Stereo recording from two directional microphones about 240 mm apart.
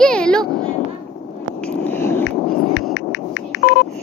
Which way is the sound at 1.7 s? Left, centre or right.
Centre.